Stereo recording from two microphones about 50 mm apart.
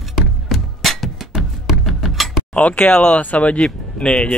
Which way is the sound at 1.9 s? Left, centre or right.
Centre.